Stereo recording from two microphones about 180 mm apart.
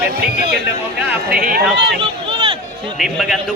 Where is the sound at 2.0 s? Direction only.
30° right (ahead or behind).